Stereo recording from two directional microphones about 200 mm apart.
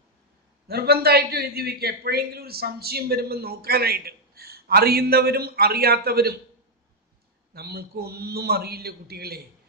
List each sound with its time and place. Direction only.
0.7 s a man's voice: 50° right (ahead or behind)
7.5 s a man's voice: 50° right (ahead or behind)